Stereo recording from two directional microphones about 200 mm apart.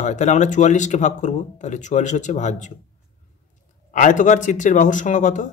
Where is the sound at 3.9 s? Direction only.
40° left (ahead or behind).